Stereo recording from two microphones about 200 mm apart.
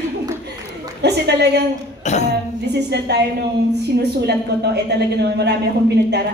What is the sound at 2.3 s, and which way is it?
A woman's voice, 55° right (ahead or behind).